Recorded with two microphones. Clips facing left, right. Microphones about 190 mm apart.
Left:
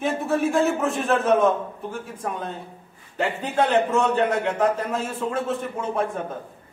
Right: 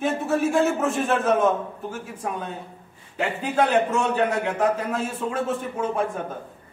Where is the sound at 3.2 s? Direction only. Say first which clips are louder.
Even; 10° right (ahead or behind).